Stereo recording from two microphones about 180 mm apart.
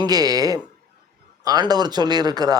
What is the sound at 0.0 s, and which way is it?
A man's voice, 20° right (ahead or behind).